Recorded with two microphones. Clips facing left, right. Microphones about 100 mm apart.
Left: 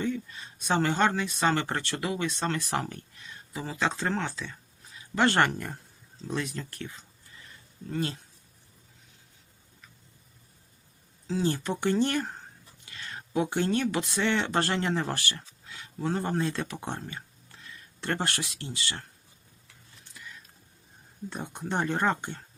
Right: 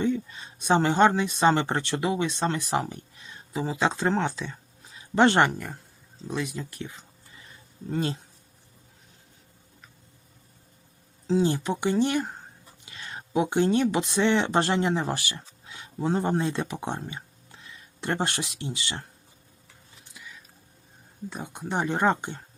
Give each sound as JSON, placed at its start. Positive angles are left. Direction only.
{"t": 0.0, "sound": "speech", "side_deg": -25}
{"t": 5.5, "sound": "speech", "side_deg": -5}
{"t": 11.3, "sound": "speech", "side_deg": -20}
{"t": 12.8, "sound": "speech", "side_deg": -20}
{"t": 20.1, "sound": "whispering", "side_deg": -5}
{"t": 21.2, "sound": "speech", "side_deg": -5}